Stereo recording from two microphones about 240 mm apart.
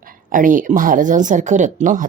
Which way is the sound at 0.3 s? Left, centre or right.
Right.